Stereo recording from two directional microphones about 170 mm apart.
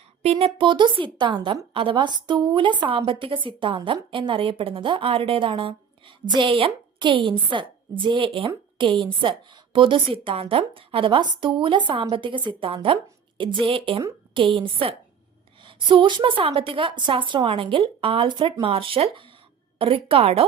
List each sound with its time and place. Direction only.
0.2 s a woman's voice: 40° right (ahead or behind)